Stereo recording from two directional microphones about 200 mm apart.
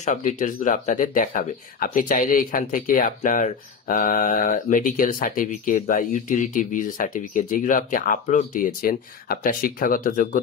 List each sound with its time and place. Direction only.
0.0 s speech: 40° left (ahead or behind)